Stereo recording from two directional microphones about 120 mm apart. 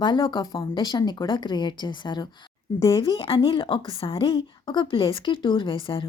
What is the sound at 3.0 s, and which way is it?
A woman's voice, 50° left (ahead or behind).